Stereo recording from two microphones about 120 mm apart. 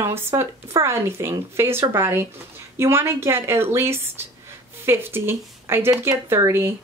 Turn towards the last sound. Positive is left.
turn(degrees=-20)  # may be behind; listen again after turning